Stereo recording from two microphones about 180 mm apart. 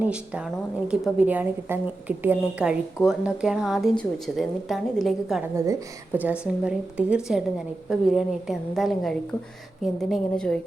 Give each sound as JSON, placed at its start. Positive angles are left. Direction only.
{"t": 0.0, "sound": "a woman's voice", "side_deg": -5}
{"t": 5.4, "sound": "a woman's voice", "side_deg": -15}
{"t": 6.4, "sound": "speech", "side_deg": -5}